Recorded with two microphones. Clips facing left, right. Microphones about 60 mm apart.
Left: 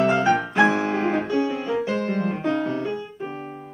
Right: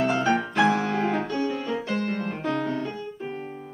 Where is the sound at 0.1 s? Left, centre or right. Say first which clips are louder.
Left 3 dB; centre.